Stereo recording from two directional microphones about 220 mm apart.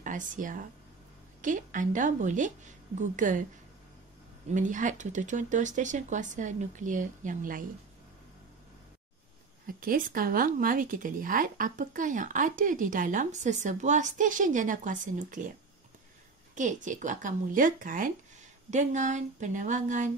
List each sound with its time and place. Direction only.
0.0 s speech: 35° right (ahead or behind)
4.5 s speech: 35° right (ahead or behind)
9.7 s speech: 40° right (ahead or behind)
16.5 s speech: 35° right (ahead or behind)